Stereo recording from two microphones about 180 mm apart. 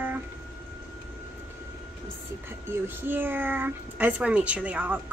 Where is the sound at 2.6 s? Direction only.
10° right (ahead or behind).